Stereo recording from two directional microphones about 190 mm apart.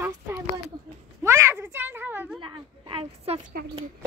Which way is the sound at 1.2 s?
15° right (ahead or behind).